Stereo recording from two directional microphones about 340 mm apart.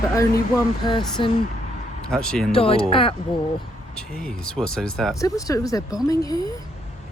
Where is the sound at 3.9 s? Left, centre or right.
Centre.